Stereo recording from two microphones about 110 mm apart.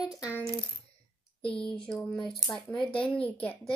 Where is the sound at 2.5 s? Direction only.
30° left (ahead or behind).